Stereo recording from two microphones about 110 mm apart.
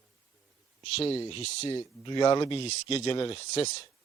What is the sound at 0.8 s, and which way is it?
Speech, 65° left (ahead or behind).